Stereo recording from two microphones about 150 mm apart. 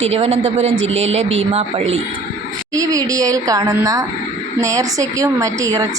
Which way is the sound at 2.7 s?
25° right (ahead or behind).